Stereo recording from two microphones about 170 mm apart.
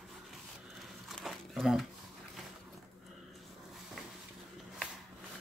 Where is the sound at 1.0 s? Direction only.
Centre (ahead or behind).